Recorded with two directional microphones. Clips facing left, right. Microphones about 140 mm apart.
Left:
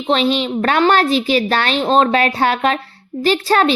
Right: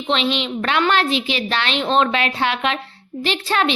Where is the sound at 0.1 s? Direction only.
40° left (ahead or behind).